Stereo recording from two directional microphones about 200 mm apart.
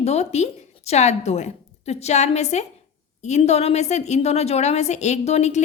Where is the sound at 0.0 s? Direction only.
35° left (ahead or behind).